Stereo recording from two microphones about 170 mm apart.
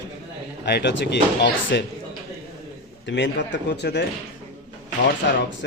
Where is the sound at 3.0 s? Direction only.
90° left.